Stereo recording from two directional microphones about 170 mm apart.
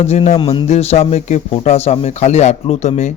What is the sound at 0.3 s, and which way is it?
Speech, 30° left (ahead or behind).